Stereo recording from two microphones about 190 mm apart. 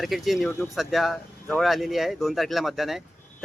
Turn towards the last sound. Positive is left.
turn(degrees=0)  # may be behind; listen again after turning